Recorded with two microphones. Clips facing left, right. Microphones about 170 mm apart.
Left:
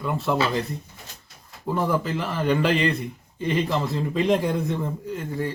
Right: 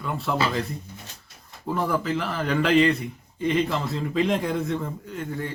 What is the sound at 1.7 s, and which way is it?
Speech, centre (ahead or behind).